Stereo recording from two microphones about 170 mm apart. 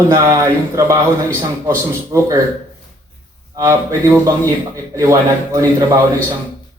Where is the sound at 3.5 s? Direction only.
20° right (ahead or behind).